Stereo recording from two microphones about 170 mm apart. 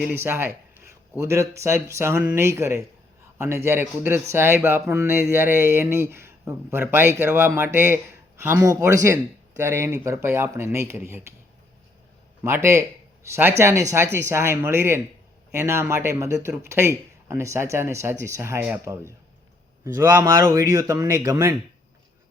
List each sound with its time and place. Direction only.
0.0 s speech: 10° right (ahead or behind)
12.4 s a man's voice: 15° right (ahead or behind)